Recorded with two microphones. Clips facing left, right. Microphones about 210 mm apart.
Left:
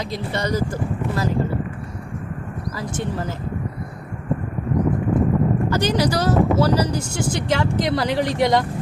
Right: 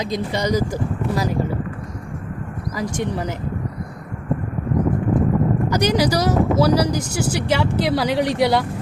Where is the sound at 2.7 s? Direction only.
15° right (ahead or behind).